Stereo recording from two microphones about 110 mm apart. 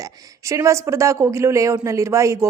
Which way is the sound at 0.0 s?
30° right (ahead or behind).